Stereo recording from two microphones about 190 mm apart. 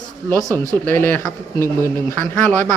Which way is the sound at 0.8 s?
10° left (ahead or behind).